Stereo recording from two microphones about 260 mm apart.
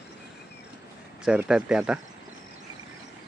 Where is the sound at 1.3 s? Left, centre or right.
Centre.